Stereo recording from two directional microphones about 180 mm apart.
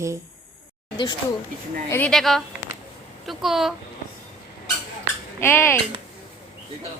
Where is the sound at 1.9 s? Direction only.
5° left (ahead or behind).